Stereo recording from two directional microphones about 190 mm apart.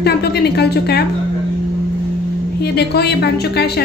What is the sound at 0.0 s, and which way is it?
A woman's voice, 60° left (ahead or behind).